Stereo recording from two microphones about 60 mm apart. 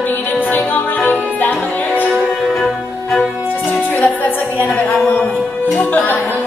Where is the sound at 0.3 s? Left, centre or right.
Left.